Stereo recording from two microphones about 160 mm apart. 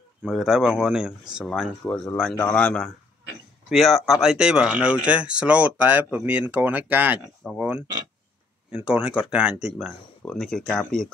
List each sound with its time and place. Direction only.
0.2 s a man's voice: centre (ahead or behind)